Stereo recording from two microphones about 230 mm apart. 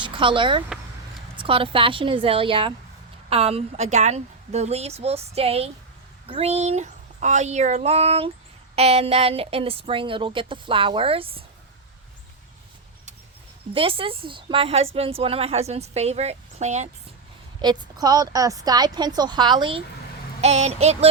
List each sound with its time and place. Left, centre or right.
0.0 s a woman's voice: right
13.7 s a woman's voice: right
17.6 s a woman's voice: centre